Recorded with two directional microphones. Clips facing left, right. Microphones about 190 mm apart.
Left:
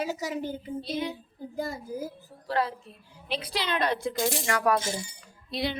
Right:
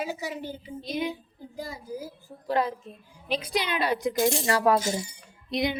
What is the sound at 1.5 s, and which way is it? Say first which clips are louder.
Speech: left 3 dB; 50° left (ahead or behind).